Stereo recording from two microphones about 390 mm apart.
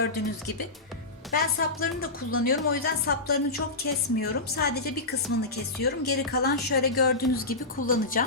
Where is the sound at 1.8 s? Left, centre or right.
Left.